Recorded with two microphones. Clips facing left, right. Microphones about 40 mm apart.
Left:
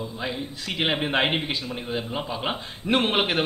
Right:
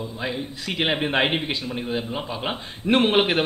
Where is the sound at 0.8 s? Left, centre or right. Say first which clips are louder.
Right 1 dB; centre.